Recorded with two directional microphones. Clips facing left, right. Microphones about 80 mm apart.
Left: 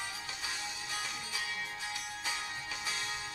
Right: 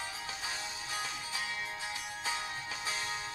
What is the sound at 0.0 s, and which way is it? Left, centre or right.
Music, right.